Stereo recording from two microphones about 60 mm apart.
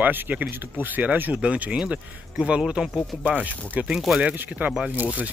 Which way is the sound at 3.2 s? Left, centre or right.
Right.